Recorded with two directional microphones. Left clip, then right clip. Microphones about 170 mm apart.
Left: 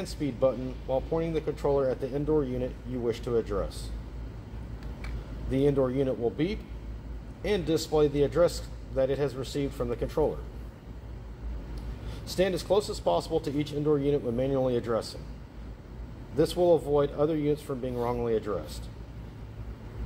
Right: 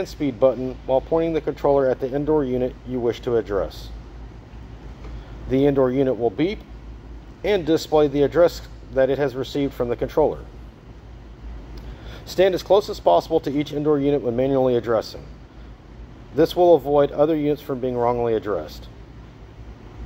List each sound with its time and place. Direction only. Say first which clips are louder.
0.0 s speech: right 8 dB; 40° right (ahead or behind)
5.5 s speech: right 8 dB; 40° right (ahead or behind)
12.3 s speech: right 10 dB; 40° right (ahead or behind)
16.3 s speech: right 8 dB; 40° right (ahead or behind)